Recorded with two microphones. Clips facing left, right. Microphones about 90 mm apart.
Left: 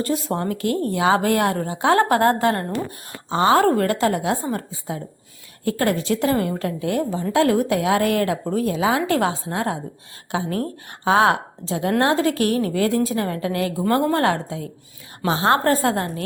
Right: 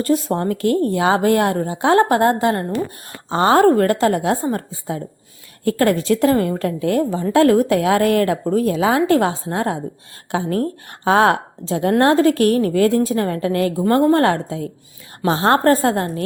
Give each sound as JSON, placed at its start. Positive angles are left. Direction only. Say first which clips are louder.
{"t": 0.3, "sound": "a woman's voice", "louder": "right 5 dB", "side_deg": -40}
{"t": 3.2, "sound": "a woman's voice", "louder": "right 3 dB", "side_deg": -40}